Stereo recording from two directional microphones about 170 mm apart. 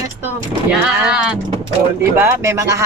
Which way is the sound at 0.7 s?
5° right (ahead or behind).